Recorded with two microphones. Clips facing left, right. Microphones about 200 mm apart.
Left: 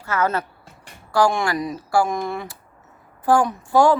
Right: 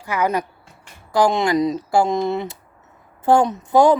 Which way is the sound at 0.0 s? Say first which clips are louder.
Right 1 dB; 15° right (ahead or behind).